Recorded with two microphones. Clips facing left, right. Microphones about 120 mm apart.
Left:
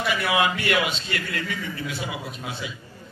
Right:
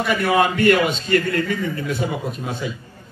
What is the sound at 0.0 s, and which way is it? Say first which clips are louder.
A man's voice: right 5 dB; 45° right (ahead or behind).